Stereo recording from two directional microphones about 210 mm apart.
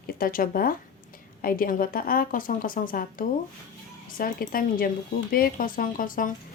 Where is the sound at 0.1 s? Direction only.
45° left (ahead or behind).